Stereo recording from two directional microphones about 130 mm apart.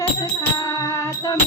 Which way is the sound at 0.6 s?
25° left (ahead or behind).